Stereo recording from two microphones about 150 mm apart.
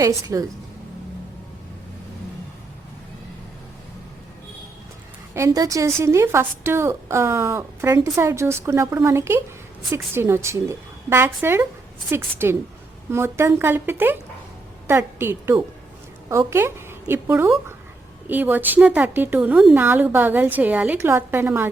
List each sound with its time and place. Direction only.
0.0 s a woman's voice: 25° right (ahead or behind)
5.3 s a woman's voice: 20° right (ahead or behind)